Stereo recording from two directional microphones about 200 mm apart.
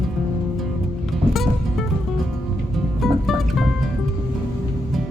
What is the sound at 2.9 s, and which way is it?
Music, centre (ahead or behind).